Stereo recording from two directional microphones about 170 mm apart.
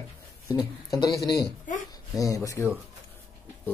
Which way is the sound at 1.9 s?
20° left (ahead or behind).